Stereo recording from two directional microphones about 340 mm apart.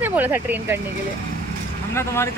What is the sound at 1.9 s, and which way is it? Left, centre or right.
Speech, centre.